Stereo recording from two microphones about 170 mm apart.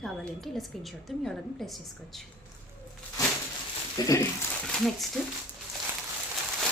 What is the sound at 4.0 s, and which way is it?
Speech, 25° left (ahead or behind).